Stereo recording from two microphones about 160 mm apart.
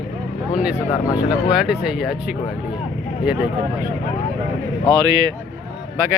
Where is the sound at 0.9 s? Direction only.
25° left (ahead or behind).